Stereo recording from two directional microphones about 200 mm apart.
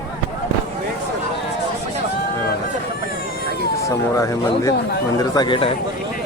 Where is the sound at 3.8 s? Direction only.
15° left (ahead or behind).